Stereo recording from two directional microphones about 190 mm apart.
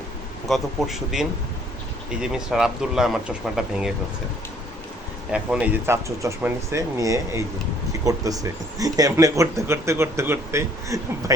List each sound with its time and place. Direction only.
0.4 s speech: centre (ahead or behind)
2.3 s speech: 5° right (ahead or behind)
5.3 s speech: 5° right (ahead or behind)